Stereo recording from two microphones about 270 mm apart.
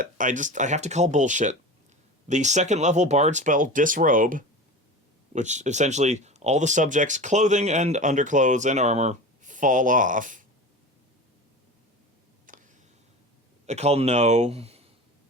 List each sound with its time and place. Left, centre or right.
0.0 s speech: right
12.5 s a sound: right
13.7 s speech: right